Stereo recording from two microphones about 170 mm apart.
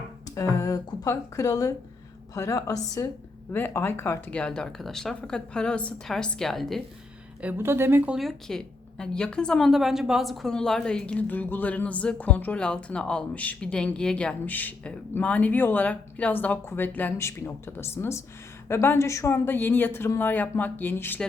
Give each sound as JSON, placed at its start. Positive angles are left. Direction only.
{"t": 0.3, "sound": "speech", "side_deg": 20}
{"t": 7.4, "sound": "a woman's voice", "side_deg": -15}